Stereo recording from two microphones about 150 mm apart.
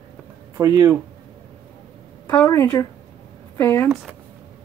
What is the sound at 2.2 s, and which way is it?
Speech, 20° left (ahead or behind).